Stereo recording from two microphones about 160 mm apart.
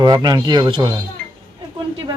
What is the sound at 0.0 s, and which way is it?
Speech, 25° right (ahead or behind).